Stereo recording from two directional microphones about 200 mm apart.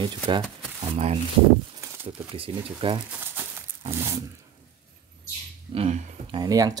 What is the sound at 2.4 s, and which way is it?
Speech, 25° right (ahead or behind).